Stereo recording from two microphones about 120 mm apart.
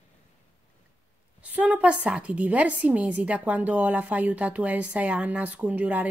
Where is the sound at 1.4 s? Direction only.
10° right (ahead or behind).